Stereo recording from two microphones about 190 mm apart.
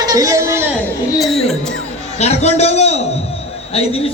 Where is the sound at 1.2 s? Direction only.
Centre (ahead or behind).